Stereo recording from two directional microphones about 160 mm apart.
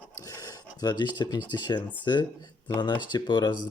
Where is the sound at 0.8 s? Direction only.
25° left (ahead or behind).